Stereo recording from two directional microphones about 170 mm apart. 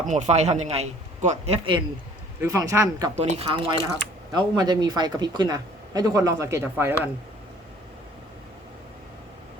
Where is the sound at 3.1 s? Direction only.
30° right (ahead or behind); by 7.0 s 10° right (ahead or behind).